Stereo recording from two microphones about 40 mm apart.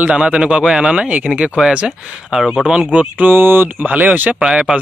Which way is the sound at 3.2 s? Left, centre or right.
Right.